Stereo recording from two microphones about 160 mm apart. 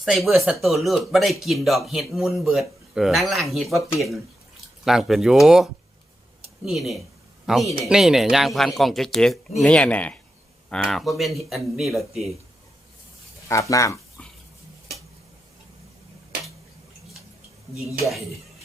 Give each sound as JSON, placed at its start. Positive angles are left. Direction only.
{"t": 0.0, "sound": "speech", "side_deg": 0}
{"t": 13.5, "sound": "speech", "side_deg": 20}